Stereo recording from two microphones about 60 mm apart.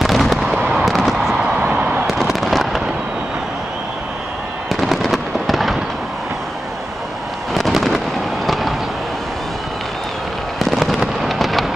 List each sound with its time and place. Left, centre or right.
0.0 s fireworks: centre
4.6 s fireworks: centre
7.5 s a sound: centre
10.6 s fireworks: centre